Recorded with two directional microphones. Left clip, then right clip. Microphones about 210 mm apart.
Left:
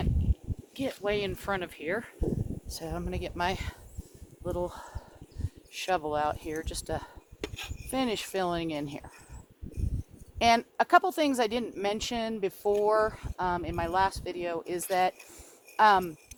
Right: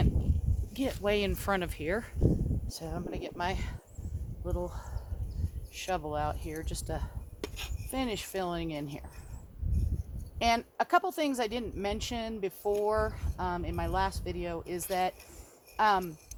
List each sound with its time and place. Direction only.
0.7 s speech: 45° right (ahead or behind)
2.6 s speech: 10° left (ahead or behind)
2.9 s speech: 25° left (ahead or behind)
4.4 s speech: 55° left (ahead or behind)
10.3 s speech: 50° left (ahead or behind)